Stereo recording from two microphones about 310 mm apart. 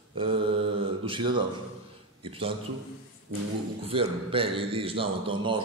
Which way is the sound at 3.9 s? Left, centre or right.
Centre.